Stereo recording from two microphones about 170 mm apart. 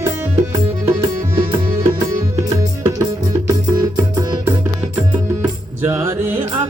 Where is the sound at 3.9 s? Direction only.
20° right (ahead or behind).